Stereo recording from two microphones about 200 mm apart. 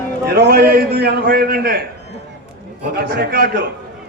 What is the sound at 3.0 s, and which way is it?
Speech, 50° right (ahead or behind).